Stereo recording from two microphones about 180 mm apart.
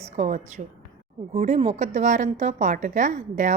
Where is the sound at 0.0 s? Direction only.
40° right (ahead or behind).